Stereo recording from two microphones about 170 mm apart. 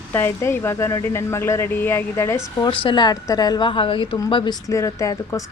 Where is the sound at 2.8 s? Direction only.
25° left (ahead or behind).